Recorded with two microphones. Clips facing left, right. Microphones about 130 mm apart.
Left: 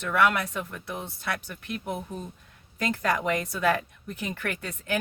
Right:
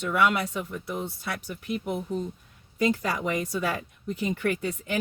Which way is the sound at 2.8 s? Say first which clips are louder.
Right 1 dB; 85° left.